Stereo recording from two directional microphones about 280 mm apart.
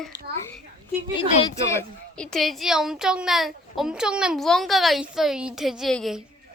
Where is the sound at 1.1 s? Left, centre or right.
Centre.